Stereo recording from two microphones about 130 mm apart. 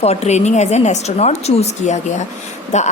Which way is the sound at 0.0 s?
55° left (ahead or behind).